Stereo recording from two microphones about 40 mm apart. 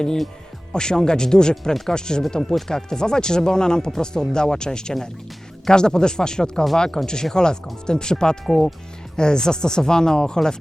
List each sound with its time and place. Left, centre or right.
0.7 s speech: centre
8.4 s speech: centre
9.1 s speech: centre